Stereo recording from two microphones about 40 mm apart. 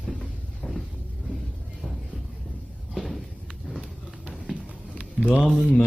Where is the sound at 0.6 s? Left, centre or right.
Centre.